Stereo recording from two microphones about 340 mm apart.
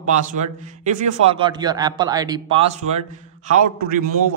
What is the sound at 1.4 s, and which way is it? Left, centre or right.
Speech, centre.